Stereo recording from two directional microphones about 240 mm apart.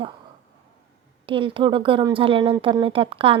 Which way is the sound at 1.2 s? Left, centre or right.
Right.